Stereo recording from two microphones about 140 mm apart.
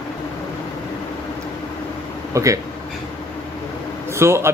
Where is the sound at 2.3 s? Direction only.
25° right (ahead or behind).